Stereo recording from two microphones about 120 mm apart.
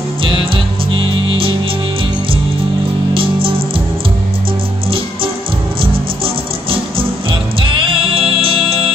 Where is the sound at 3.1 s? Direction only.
50° right (ahead or behind).